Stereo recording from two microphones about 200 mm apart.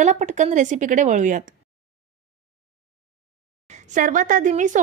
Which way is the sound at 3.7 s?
35° right (ahead or behind).